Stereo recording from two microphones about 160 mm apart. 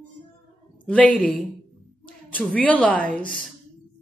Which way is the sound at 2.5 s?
10° left (ahead or behind).